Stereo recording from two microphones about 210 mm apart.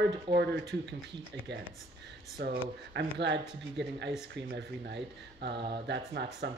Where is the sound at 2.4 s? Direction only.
50° right (ahead or behind).